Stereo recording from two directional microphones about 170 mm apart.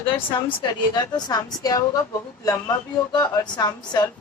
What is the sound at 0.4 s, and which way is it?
A woman's voice, 25° left (ahead or behind).